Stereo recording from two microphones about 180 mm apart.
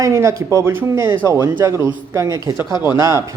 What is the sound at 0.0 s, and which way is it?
Speech, 15° right (ahead or behind).